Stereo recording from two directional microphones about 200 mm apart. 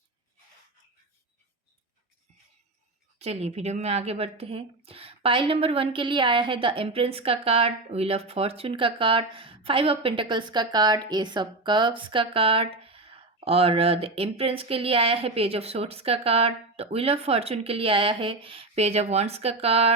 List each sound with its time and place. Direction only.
3.2 s speech: 30° right (ahead or behind)